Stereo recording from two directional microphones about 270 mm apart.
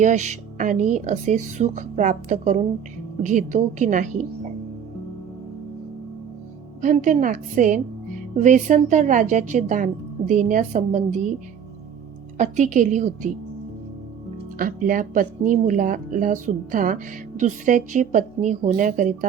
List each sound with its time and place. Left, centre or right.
0.0 s a woman's voice: right
6.8 s a woman's voice: right
12.4 s a woman's voice: right
14.6 s a woman's voice: right